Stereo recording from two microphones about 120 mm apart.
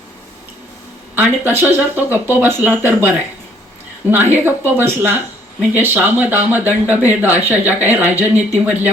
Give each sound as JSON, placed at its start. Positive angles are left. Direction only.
{"t": 1.1, "sound": "speech", "side_deg": -15}
{"t": 4.1, "sound": "speech", "side_deg": -15}